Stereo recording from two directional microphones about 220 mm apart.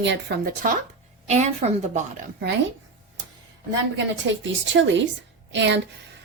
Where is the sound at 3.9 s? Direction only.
55° right (ahead or behind).